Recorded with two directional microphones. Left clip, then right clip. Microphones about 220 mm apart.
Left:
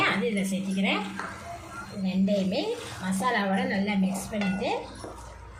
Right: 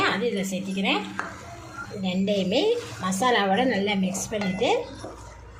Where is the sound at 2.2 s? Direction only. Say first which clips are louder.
Right 5 dB; 40° right (ahead or behind).